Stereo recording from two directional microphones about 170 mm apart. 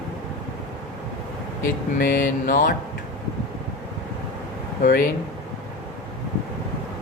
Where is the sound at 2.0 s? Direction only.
50° left (ahead or behind).